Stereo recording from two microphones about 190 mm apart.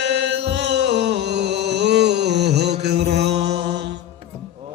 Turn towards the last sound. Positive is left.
turn(degrees=-60)  # may be behind; listen again after turning